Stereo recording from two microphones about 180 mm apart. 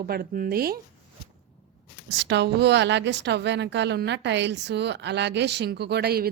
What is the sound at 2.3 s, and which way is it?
A woman's voice, 70° right (ahead or behind).